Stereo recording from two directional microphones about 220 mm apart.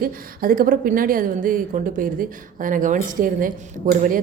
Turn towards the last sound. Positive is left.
turn(degrees=-40)  # may be behind; listen again after turning